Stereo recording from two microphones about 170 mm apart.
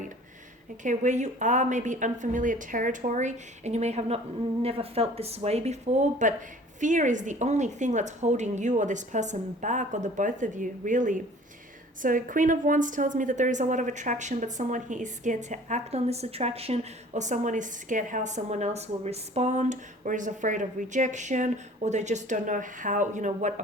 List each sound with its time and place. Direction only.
0.8 s a woman's voice: 45° right (ahead or behind)